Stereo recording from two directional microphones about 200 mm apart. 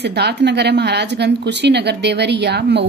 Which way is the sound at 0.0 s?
55° right (ahead or behind).